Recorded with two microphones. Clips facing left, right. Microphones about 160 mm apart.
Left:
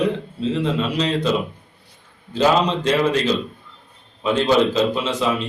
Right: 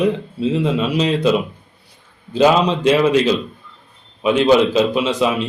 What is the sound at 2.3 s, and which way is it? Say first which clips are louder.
A man's voice: right 4 dB; 15° right (ahead or behind).